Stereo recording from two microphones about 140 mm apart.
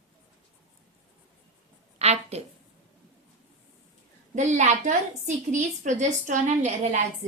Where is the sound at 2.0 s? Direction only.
50° right (ahead or behind).